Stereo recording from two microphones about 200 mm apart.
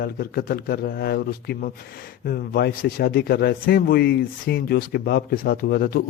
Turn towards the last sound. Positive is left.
turn(degrees=50)  # may be behind; listen again after turning